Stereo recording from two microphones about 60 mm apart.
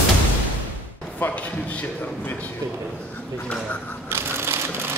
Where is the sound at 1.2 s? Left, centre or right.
Left.